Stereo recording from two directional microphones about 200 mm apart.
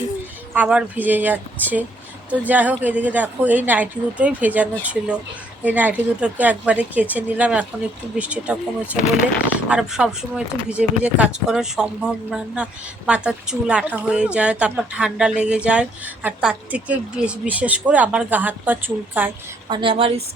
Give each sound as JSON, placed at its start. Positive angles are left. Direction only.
{"t": 0.5, "sound": "a woman's voice", "side_deg": -5}
{"t": 19.6, "sound": "a woman's voice", "side_deg": -25}